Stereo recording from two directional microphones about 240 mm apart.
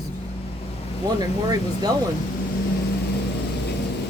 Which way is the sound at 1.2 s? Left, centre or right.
Centre.